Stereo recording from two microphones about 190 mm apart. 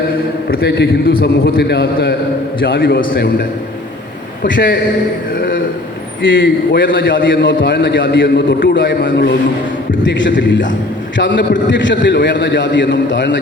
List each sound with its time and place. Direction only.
0.5 s a man's voice: 55° left (ahead or behind)
4.4 s a man's voice: 70° left (ahead or behind)
6.2 s a man's voice: 75° left (ahead or behind)